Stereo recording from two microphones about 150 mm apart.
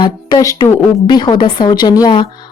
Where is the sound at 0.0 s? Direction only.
30° left (ahead or behind).